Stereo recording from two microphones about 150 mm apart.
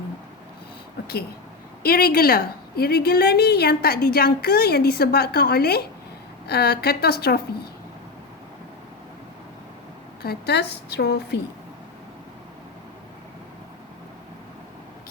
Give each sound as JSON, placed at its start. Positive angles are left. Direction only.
{"t": 1.8, "sound": "a woman's voice", "side_deg": 85}
{"t": 10.2, "sound": "a woman's voice", "side_deg": 90}